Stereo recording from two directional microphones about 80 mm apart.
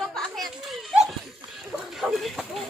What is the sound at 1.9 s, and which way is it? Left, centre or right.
Speech, centre.